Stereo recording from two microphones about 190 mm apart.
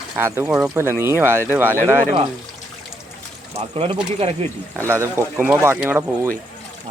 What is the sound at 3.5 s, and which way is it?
Speech, 30° right (ahead or behind).